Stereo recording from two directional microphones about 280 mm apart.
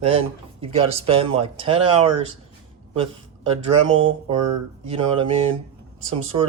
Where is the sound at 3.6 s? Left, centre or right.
Centre.